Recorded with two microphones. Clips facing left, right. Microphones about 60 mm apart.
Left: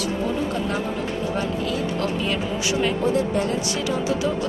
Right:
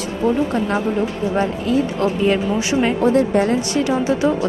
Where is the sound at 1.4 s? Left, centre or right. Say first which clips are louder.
Right 10 dB; right.